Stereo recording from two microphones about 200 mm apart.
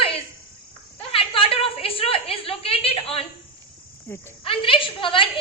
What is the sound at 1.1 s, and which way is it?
A woman's voice, 25° left (ahead or behind).